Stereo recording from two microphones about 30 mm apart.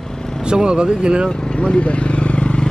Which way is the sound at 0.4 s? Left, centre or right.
Right.